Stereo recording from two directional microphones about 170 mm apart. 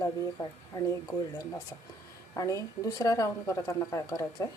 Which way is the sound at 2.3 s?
20° left (ahead or behind).